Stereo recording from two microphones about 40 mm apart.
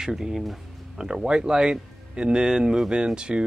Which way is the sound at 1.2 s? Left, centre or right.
Right.